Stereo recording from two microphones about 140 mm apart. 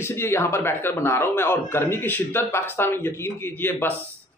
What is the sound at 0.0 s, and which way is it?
A man's voice, 20° left (ahead or behind).